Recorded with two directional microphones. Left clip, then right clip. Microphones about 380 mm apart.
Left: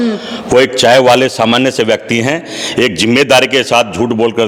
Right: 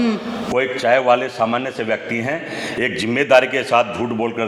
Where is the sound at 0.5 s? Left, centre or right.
Left.